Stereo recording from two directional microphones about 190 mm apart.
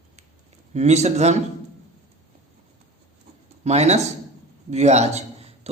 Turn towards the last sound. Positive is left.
turn(degrees=-35)  # may be behind; listen again after turning